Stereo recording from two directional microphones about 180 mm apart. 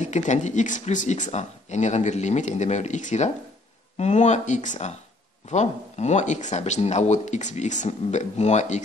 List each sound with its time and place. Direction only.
0.0 s speech: 40° left (ahead or behind)